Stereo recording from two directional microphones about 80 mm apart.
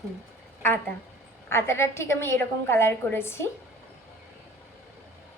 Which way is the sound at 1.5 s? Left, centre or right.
Left.